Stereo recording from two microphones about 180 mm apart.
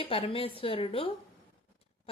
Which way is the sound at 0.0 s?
30° left (ahead or behind).